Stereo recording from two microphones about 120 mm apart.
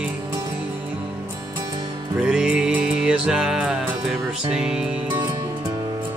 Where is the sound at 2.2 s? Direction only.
5° right (ahead or behind).